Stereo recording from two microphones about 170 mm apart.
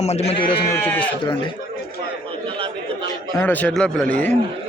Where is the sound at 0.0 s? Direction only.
40° left (ahead or behind).